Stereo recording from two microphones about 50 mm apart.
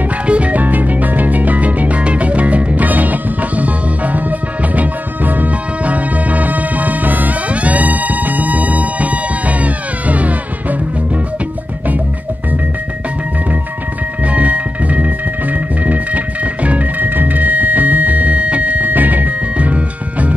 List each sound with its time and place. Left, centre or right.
0.3 s music: right
14.2 s music: right